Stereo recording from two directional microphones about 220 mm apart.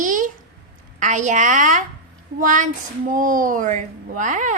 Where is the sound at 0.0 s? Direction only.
35° right (ahead or behind).